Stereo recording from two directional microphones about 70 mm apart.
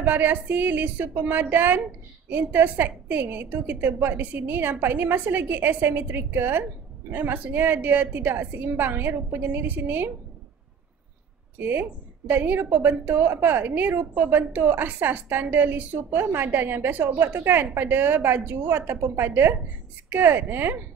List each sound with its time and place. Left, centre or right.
0.0 s a woman's voice: right
12.3 s a woman's voice: right